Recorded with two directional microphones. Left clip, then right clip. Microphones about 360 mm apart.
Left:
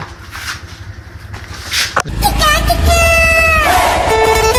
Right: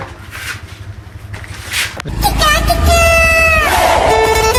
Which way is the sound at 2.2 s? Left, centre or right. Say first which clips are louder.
Right 2 dB; centre.